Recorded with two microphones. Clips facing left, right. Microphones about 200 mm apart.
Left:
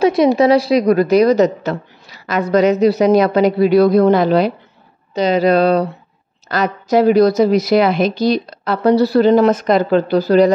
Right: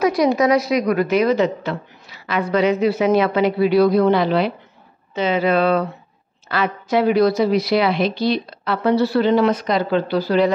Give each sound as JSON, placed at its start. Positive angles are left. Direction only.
{"t": 0.0, "sound": "a woman's voice", "side_deg": 25}